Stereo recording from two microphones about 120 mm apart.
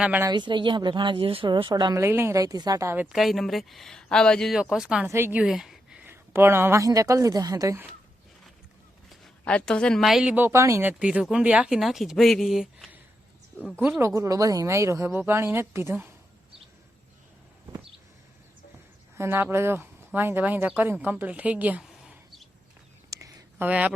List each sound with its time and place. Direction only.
0.3 s speech: 40° right (ahead or behind)
1.7 s speech: 30° right (ahead or behind)
2.0 s speech: 20° right (ahead or behind)
2.9 s speech: 15° right (ahead or behind)
3.2 s speech: centre (ahead or behind)
5.0 s speech: 20° right (ahead or behind)
5.4 s a sound: 5° right (ahead or behind)
6.1 s speech: 20° right (ahead or behind)
9.4 s speech: 10° left (ahead or behind)
10.3 s speech: 20° right (ahead or behind); by 12.9 s centre (ahead or behind)
14.0 s speech: 25° right (ahead or behind)
19.1 s speech: 20° right (ahead or behind)
23.0 s a sound: 30° right (ahead or behind)
23.6 s speech: 10° right (ahead or behind)